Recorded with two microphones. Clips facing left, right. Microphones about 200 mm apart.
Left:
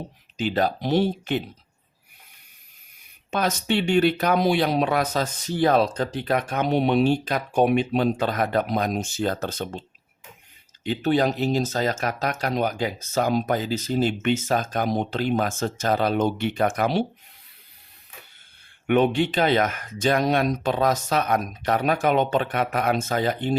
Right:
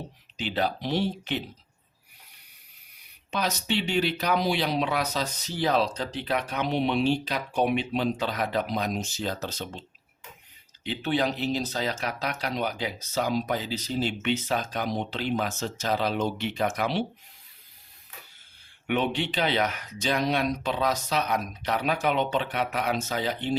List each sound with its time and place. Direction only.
0.3 s speech: 45° left (ahead or behind)
3.3 s speech: 50° left (ahead or behind)
10.8 s speech: 45° left (ahead or behind)
18.9 s speech: 50° left (ahead or behind)